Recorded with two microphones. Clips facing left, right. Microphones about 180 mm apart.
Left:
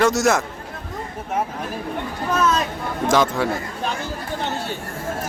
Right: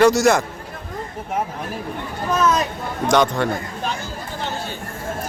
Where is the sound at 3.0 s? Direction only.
5° left (ahead or behind).